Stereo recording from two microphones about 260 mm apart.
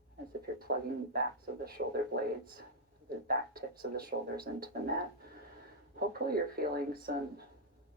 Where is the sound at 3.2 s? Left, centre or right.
Right.